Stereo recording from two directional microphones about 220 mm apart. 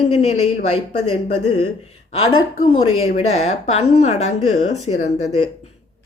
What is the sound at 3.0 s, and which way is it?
Speech, 30° left (ahead or behind).